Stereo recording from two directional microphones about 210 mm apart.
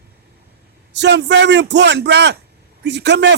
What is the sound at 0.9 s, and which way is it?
A man's voice, 55° right (ahead or behind).